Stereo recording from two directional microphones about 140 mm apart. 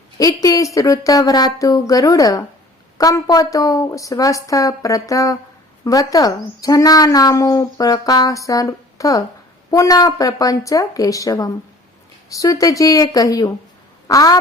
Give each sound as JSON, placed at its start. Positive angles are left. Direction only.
{"t": 0.4, "sound": "a woman's voice", "side_deg": 25}